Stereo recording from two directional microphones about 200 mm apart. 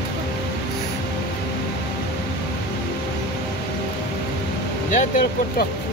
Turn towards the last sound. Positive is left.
turn(degrees=40)  # may be behind; listen again after turning